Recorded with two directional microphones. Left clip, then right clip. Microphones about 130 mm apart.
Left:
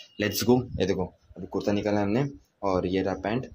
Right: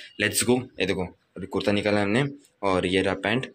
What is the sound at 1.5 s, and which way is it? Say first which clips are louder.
Speech: right 3 dB; centre (ahead or behind).